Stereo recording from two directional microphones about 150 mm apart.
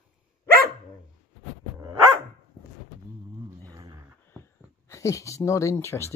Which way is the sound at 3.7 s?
25° right (ahead or behind).